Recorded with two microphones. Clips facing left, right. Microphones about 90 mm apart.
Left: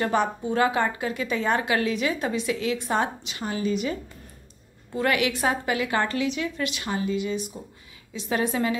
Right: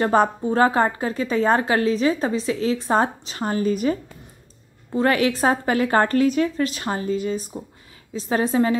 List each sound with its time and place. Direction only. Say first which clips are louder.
0.0 s a woman's voice: right 6 dB; 40° right (ahead or behind)